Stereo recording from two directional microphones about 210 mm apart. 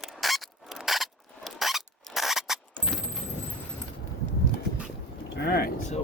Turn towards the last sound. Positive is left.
turn(degrees=50)  # may be behind; listen again after turning